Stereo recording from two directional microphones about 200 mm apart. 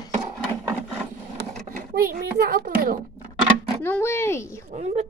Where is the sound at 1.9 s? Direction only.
50° right (ahead or behind).